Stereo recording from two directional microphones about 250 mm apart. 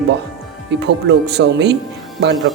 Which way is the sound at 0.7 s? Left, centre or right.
Right.